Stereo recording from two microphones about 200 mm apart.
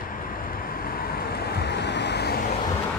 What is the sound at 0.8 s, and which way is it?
Vehicle, 50° left (ahead or behind).